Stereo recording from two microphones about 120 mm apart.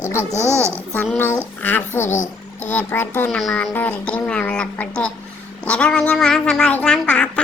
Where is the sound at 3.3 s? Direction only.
5° left (ahead or behind).